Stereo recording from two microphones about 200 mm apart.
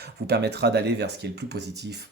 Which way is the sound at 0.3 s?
55° right (ahead or behind).